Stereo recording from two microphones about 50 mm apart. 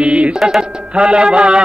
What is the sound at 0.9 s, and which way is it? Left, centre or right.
Mantra, centre.